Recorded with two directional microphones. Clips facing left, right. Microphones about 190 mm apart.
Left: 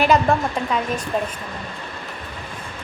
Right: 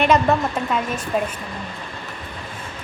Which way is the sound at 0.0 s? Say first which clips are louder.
Even; centre (ahead or behind).